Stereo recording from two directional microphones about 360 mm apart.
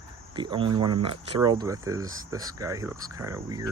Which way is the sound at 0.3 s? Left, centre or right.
Centre.